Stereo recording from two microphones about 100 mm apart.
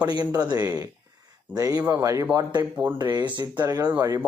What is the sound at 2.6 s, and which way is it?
Speech, 20° right (ahead or behind).